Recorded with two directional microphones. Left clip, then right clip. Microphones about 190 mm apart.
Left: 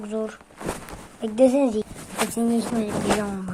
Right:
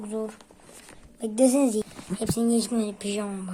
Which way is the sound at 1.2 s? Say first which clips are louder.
Left 3 dB; 5° right (ahead or behind).